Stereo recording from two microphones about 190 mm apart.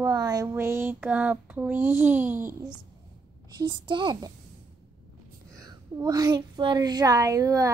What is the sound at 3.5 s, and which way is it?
Speech, 20° right (ahead or behind).